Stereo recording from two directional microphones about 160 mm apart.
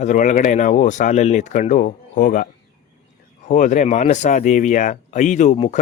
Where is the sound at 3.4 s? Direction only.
50° left (ahead or behind).